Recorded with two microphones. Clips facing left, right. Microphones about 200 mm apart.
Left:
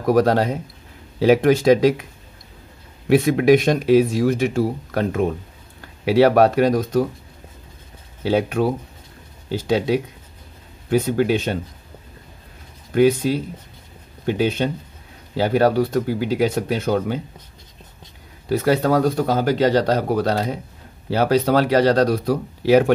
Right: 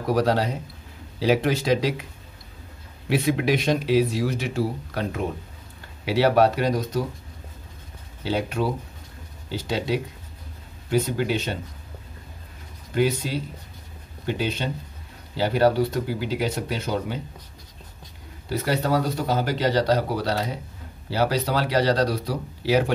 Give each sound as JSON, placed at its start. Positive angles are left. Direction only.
{"t": 0.0, "sound": "speech", "side_deg": 50}
{"t": 3.1, "sound": "speech", "side_deg": 50}
{"t": 8.2, "sound": "speech", "side_deg": 55}
{"t": 9.7, "sound": "speech", "side_deg": 55}
{"t": 12.9, "sound": "speech", "side_deg": 55}
{"t": 18.5, "sound": "speech", "side_deg": 50}